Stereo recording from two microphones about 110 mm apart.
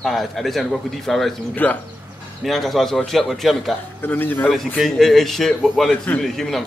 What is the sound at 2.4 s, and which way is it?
Speech, centre (ahead or behind).